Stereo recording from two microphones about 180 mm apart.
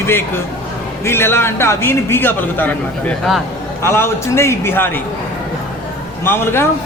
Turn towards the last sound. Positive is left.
turn(degrees=15)  # may be behind; listen again after turning